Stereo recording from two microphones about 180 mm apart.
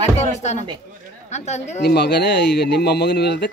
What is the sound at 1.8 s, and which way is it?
Speech, 65° left (ahead or behind).